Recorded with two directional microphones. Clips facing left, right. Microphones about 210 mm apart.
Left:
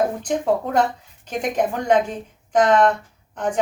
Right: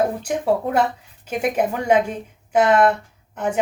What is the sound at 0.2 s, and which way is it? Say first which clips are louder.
Speech: even; 10° right (ahead or behind).